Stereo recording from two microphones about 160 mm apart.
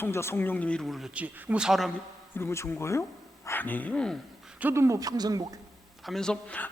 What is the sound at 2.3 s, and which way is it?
A man's voice, 15° left (ahead or behind).